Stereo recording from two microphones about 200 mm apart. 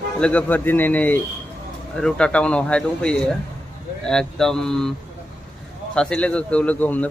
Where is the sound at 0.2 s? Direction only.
5° left (ahead or behind).